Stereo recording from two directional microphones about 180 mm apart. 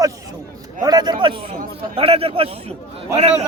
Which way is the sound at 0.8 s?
20° right (ahead or behind).